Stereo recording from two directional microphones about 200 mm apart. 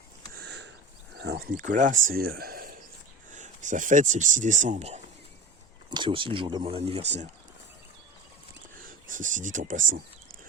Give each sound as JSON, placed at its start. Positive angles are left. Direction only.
{"t": 0.3, "sound": "sniff", "side_deg": -60}
{"t": 1.2, "sound": "speech", "side_deg": -55}
{"t": 9.0, "sound": "speech", "side_deg": -40}